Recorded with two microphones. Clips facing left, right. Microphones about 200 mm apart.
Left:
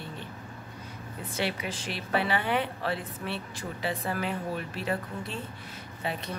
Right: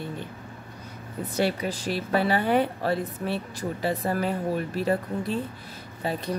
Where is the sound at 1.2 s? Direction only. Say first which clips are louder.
Right 6 dB; 40° right (ahead or behind).